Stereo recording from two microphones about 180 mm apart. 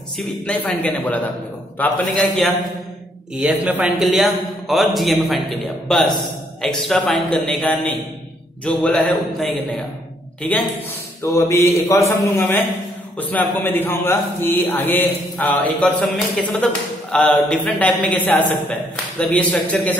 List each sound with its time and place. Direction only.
0.2 s a man's voice: 5° left (ahead or behind)